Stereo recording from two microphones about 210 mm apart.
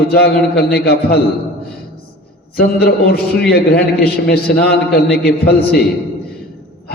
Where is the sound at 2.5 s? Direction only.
50° left (ahead or behind).